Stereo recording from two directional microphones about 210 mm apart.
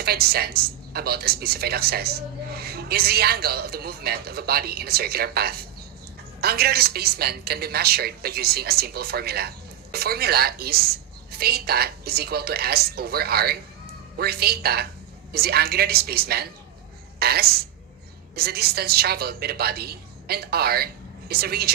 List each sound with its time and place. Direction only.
0.0 s speech: 50° right (ahead or behind)